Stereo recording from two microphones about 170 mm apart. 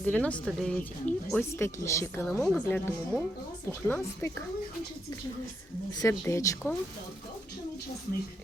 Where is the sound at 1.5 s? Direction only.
15° left (ahead or behind).